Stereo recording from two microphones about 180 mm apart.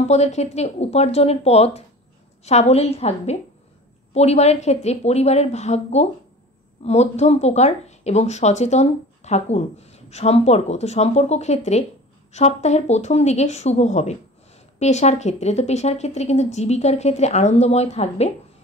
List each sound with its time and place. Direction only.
0.1 s speech: 40° left (ahead or behind)